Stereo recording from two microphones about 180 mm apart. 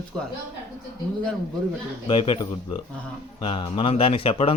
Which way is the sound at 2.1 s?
30° left (ahead or behind).